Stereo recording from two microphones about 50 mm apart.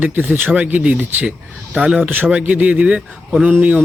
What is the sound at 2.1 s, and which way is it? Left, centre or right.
Speech, right.